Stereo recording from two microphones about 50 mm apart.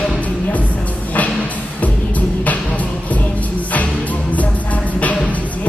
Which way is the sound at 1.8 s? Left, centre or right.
Left.